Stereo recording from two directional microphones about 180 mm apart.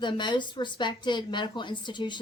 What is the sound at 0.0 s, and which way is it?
Speech, 25° left (ahead or behind).